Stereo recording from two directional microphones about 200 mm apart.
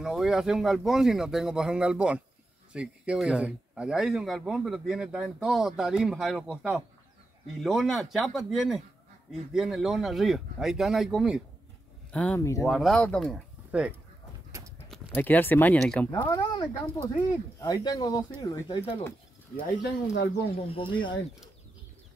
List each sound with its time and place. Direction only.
0.0 s speech: centre (ahead or behind); by 12.6 s 15° left (ahead or behind)
12.6 s speech: centre (ahead or behind)
15.1 s speech: 10° left (ahead or behind)
19.6 s speech: 55° left (ahead or behind)
20.5 s speech: 25° left (ahead or behind)